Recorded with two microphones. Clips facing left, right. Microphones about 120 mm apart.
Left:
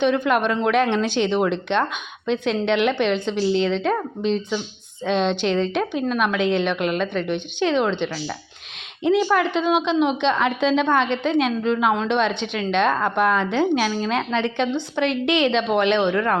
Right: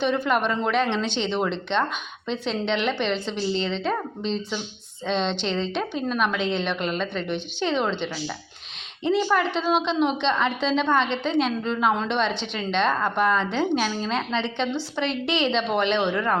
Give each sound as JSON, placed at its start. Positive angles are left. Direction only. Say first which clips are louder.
{"t": 0.0, "sound": "a woman's voice", "louder": "left 4 dB", "side_deg": 0}